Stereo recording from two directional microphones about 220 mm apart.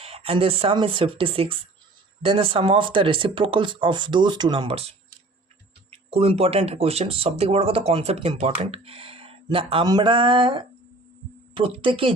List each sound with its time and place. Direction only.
0.0 s speech: 25° right (ahead or behind)